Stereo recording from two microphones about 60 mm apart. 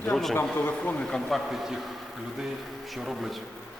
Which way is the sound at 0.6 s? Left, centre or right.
Left.